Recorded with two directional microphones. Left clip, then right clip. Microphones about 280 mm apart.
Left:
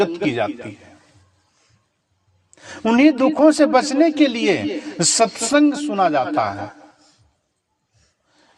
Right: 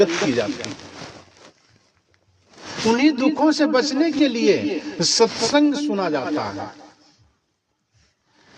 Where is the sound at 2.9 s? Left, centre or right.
Left.